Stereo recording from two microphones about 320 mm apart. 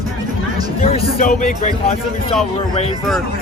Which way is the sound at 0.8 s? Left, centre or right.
Left.